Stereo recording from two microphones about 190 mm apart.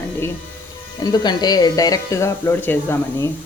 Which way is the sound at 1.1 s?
20° left (ahead or behind).